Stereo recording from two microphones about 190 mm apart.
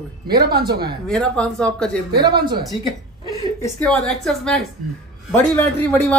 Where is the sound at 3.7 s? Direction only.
5° left (ahead or behind).